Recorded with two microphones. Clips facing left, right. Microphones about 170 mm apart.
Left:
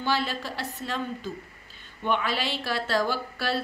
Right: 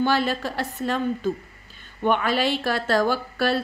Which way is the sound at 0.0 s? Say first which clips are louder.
Right 6 dB; 50° right (ahead or behind).